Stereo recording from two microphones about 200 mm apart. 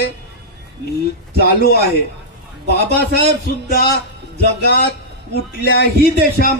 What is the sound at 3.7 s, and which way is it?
A man's voice, 50° left (ahead or behind).